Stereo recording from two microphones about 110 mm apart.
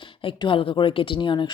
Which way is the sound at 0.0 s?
50° left (ahead or behind).